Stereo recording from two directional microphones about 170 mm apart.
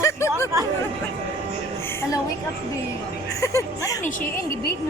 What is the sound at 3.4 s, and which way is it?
Speech, 20° left (ahead or behind).